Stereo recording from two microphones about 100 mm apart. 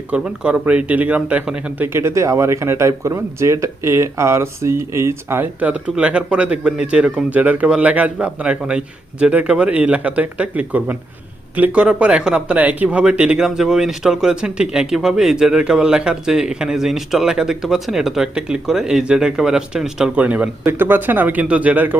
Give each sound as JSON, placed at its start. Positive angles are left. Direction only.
{"t": 0.1, "sound": "speech", "side_deg": -10}